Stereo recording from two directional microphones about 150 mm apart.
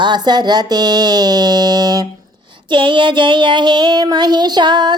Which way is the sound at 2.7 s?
35° right (ahead or behind).